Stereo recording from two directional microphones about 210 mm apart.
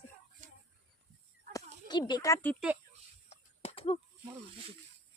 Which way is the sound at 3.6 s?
30° left (ahead or behind).